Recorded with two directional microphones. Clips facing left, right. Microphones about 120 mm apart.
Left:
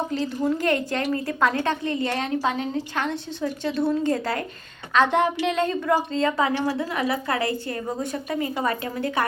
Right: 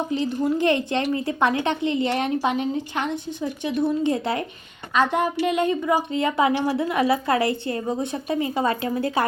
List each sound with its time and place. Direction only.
0.1 s a woman's voice: 20° right (ahead or behind)
4.9 s a woman's voice: 10° right (ahead or behind); by 9.2 s 30° right (ahead or behind)